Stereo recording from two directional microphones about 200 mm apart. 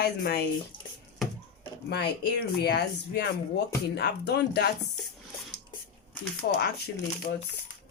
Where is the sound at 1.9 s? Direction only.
55° left (ahead or behind).